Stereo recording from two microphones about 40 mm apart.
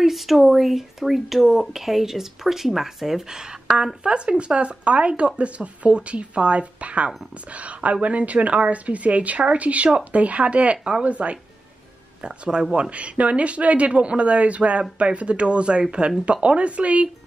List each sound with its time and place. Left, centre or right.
0.0 s speech: centre
3.3 s speech: centre
12.2 s speech: right